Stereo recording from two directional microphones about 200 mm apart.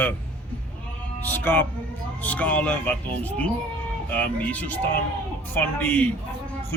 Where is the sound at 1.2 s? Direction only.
10° left (ahead or behind).